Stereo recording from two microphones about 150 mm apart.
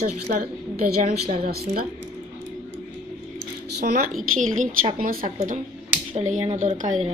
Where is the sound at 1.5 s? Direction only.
75° right (ahead or behind).